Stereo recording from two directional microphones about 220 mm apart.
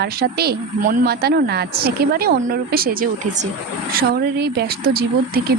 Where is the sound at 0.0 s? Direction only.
45° right (ahead or behind).